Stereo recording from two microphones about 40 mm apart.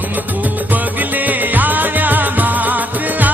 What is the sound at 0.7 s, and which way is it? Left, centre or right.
Music, right.